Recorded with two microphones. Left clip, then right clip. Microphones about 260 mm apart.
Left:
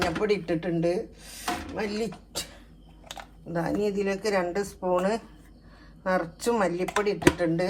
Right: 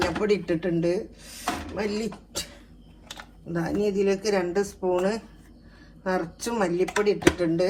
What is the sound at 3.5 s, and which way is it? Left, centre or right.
Speech, left.